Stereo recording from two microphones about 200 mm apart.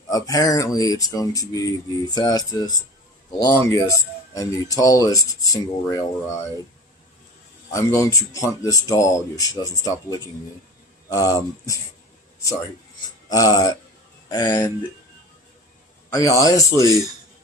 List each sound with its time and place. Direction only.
0.1 s speech: 20° left (ahead or behind)
7.7 s speech: 15° left (ahead or behind)
13.2 s speech: 20° left (ahead or behind)
16.0 s speech: 15° left (ahead or behind)